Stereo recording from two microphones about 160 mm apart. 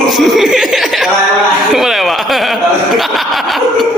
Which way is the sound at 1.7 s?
Centre (ahead or behind).